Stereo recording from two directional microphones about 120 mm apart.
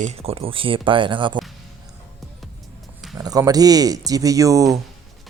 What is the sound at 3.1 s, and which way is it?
Speech, 30° right (ahead or behind).